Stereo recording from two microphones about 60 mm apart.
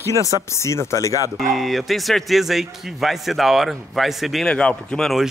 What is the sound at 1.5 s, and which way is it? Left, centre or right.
A man's voice, centre.